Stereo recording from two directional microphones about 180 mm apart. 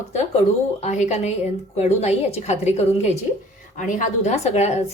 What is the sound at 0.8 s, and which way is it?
A woman's voice, 40° left (ahead or behind).